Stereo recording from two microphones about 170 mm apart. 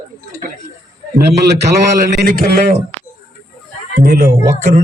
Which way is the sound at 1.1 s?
75° right (ahead or behind).